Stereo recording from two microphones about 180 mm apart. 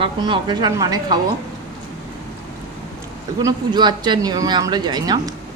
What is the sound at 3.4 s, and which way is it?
Speech, 25° right (ahead or behind).